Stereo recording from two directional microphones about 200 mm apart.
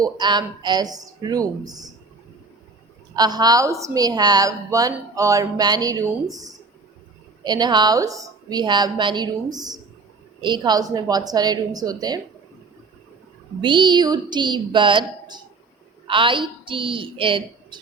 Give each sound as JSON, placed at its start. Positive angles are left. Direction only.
{"t": 0.0, "sound": "a woman's voice", "side_deg": -20}
{"t": 3.2, "sound": "a woman's voice", "side_deg": -20}
{"t": 13.6, "sound": "a woman's voice", "side_deg": -25}